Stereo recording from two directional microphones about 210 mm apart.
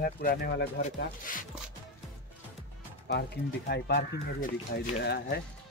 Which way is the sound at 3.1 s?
50° left (ahead or behind).